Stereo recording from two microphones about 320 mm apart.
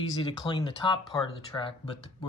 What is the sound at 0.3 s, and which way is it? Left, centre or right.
Speech, centre.